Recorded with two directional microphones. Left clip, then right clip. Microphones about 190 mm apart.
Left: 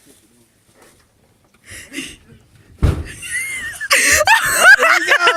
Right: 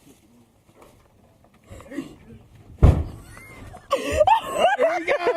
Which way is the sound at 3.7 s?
40° left (ahead or behind).